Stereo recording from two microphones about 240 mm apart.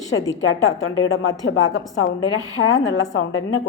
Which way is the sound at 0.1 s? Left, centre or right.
Left.